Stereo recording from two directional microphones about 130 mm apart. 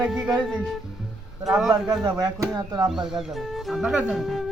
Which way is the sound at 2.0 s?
25° right (ahead or behind).